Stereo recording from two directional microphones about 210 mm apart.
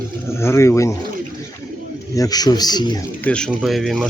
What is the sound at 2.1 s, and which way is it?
Speech, 15° left (ahead or behind).